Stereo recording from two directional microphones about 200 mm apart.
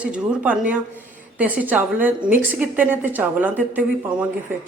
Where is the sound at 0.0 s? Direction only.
5° right (ahead or behind).